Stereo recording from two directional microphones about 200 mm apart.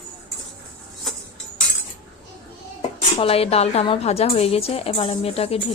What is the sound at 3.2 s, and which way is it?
A woman's voice, 30° left (ahead or behind).